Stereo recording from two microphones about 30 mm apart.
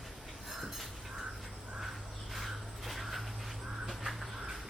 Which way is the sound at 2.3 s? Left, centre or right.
Centre.